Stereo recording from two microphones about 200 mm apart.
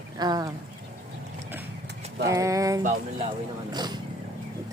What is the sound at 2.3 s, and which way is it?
Speech, 15° right (ahead or behind).